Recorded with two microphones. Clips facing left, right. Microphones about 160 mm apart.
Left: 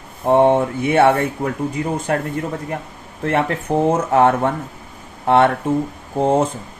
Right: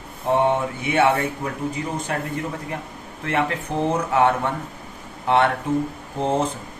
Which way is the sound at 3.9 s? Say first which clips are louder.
Left 4 dB; 45° left (ahead or behind).